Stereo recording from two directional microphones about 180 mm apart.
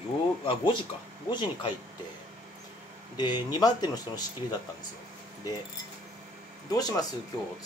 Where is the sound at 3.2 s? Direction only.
20° left (ahead or behind).